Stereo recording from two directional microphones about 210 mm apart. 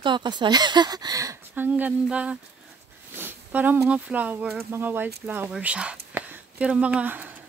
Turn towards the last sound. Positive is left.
turn(degrees=-5)  # may be behind; listen again after turning